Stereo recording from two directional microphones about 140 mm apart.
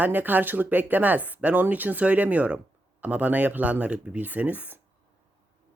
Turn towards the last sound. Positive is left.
turn(degrees=-10)  # may be behind; listen again after turning